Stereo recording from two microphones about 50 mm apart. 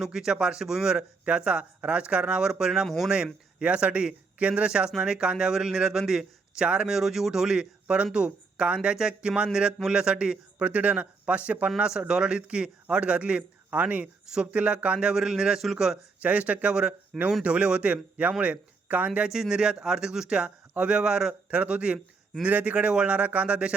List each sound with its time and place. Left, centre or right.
0.0 s speech: centre
2.8 s speech: centre
3.6 s speech: right
14.9 s speech: centre
16.2 s speech: right
19.3 s speech: centre
21.5 s speech: right